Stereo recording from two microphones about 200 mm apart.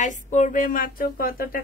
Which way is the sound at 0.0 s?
35° left (ahead or behind).